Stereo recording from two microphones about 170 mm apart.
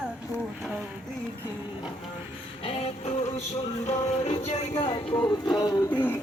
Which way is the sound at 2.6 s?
35° left (ahead or behind).